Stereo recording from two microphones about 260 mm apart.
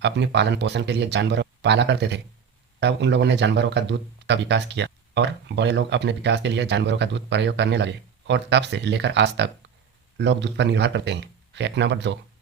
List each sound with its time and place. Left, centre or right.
0.0 s speech: right